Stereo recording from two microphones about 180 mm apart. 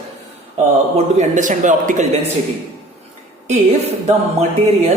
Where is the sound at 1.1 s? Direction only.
45° right (ahead or behind).